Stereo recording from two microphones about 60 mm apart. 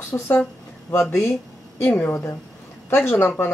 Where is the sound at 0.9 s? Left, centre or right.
Left.